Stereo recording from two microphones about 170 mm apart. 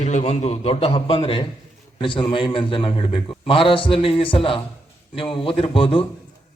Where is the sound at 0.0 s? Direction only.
40° left (ahead or behind).